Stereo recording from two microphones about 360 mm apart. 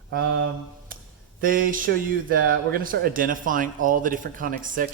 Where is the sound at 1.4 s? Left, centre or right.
Right.